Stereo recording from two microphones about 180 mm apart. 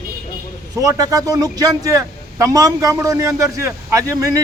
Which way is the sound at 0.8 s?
20° right (ahead or behind).